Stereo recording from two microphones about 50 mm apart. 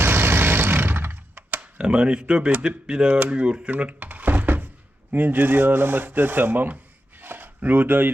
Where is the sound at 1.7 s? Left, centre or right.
Right.